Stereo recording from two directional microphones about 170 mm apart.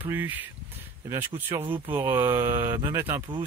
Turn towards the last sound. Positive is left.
turn(degrees=-15)  # may be behind; listen again after turning